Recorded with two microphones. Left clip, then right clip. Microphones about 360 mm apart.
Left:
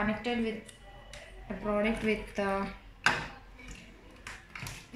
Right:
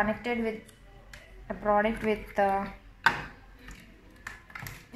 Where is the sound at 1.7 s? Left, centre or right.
Right.